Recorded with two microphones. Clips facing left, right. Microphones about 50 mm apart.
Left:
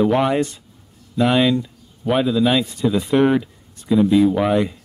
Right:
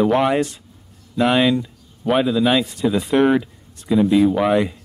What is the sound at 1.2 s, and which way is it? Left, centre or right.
Speech, centre.